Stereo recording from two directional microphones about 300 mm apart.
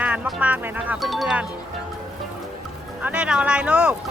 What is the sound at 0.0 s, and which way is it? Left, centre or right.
Speech, centre.